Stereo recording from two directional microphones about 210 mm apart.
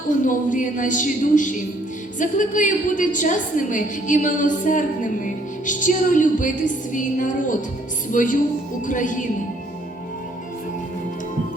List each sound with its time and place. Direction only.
0.3 s a woman's voice: 40° left (ahead or behind)